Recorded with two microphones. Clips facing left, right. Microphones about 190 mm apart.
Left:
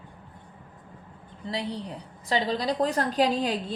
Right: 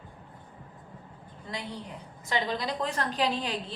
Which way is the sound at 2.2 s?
35° left (ahead or behind).